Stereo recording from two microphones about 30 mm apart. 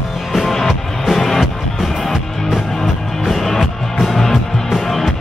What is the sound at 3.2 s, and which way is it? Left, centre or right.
Music, centre.